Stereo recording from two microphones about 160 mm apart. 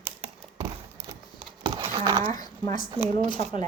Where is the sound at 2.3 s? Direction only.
25° left (ahead or behind).